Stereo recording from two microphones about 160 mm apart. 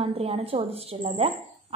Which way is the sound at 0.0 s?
40° right (ahead or behind).